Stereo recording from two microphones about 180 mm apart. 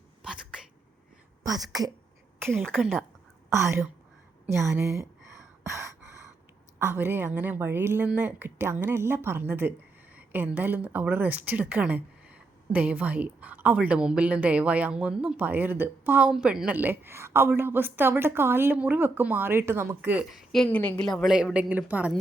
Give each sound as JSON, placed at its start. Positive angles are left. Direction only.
{"t": 0.2, "sound": "a sound", "side_deg": -5}
{"t": 1.5, "sound": "a woman's voice", "side_deg": -20}
{"t": 2.6, "sound": "a woman's voice", "side_deg": 0}
{"t": 3.5, "sound": "a woman's voice", "side_deg": -15}
{"t": 5.6, "sound": "a sound", "side_deg": -15}
{"t": 6.7, "sound": "a woman's voice", "side_deg": -10}